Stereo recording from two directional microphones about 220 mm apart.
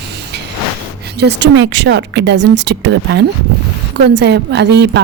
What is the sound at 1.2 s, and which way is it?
A woman's voice, 50° right (ahead or behind).